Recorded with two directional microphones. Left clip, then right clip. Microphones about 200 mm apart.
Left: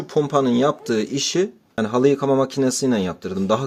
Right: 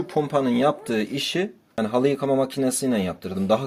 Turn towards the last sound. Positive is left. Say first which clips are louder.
# left 1 dB
turn(degrees=35)  # may be behind; listen again after turning